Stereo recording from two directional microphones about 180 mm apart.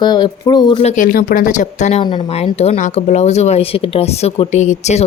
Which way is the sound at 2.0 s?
25° left (ahead or behind).